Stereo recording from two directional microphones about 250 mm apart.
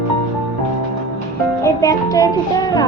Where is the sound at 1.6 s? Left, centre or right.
Centre.